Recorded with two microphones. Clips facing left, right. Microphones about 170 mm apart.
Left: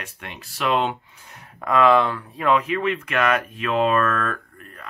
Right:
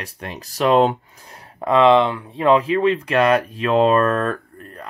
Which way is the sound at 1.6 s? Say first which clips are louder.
Right 3 dB; 25° right (ahead or behind).